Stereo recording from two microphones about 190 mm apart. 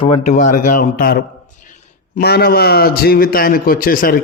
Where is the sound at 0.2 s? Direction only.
45° left (ahead or behind).